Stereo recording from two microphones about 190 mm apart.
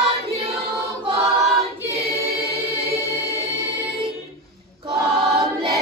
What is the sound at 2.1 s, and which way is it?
Choir, 15° right (ahead or behind).